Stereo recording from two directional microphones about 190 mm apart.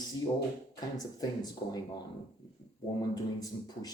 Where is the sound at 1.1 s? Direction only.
20° left (ahead or behind).